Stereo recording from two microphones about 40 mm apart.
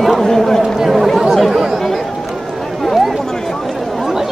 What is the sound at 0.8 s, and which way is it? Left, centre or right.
Chatter, centre.